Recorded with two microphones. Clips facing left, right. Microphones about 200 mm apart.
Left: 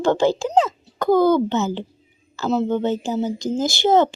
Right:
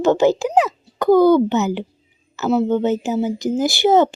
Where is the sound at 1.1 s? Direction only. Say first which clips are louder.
Right 4 dB; 20° left (ahead or behind).